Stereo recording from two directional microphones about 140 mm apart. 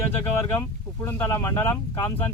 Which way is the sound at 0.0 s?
15° left (ahead or behind).